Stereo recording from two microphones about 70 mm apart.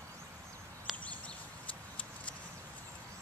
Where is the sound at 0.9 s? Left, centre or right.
Centre.